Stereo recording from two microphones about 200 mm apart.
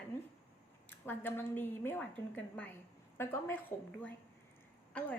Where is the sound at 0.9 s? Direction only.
10° left (ahead or behind).